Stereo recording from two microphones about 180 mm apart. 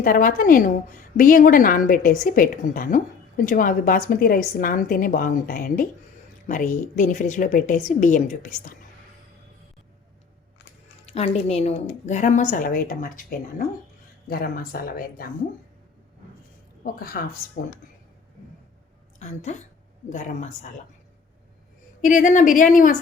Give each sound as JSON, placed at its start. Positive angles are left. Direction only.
{"t": 0.0, "sound": "a woman's voice", "side_deg": 50}
{"t": 11.1, "sound": "a woman's voice", "side_deg": 35}
{"t": 16.8, "sound": "a woman's voice", "side_deg": 55}
{"t": 19.2, "sound": "a woman's voice", "side_deg": 40}
{"t": 22.0, "sound": "a woman's voice", "side_deg": 45}